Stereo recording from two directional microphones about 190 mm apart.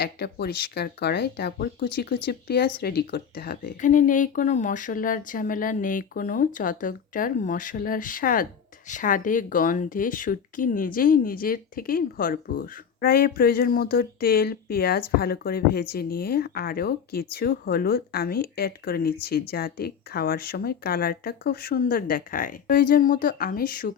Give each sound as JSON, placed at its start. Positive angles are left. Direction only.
{"t": 0.0, "sound": "speech", "side_deg": 60}